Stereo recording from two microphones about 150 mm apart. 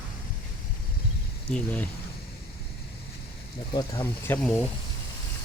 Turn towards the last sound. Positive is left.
turn(degrees=15)  # may be behind; listen again after turning